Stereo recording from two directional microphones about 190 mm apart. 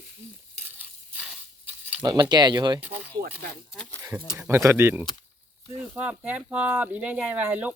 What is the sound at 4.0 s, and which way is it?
Speech, 20° right (ahead or behind).